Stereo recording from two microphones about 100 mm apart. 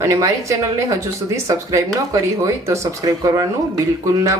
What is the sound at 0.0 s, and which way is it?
Speech, 30° right (ahead or behind).